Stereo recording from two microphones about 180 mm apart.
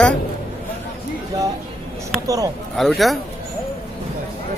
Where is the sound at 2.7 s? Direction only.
Centre (ahead or behind).